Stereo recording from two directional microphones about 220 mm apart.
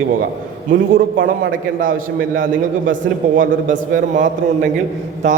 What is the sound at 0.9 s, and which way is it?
A man's voice, 40° right (ahead or behind).